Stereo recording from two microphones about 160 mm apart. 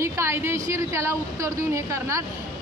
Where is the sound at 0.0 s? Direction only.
15° right (ahead or behind).